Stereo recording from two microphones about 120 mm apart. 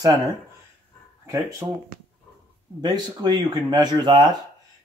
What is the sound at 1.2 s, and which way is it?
Speech, 25° right (ahead or behind).